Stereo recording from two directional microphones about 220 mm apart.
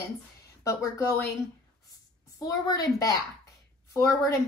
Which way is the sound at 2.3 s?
15° left (ahead or behind).